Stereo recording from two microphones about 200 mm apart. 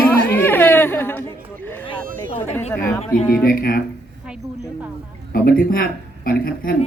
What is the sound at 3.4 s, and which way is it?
Speech, 45° left (ahead or behind).